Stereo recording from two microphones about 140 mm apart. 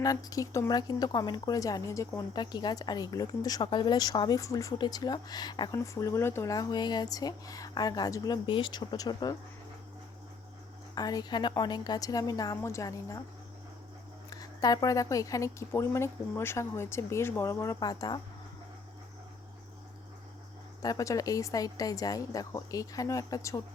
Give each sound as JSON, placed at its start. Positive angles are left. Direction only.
{"t": 0.0, "sound": "speech", "side_deg": 25}
{"t": 10.9, "sound": "speech", "side_deg": 30}
{"t": 14.3, "sound": "speech", "side_deg": 25}
{"t": 20.8, "sound": "speech", "side_deg": 25}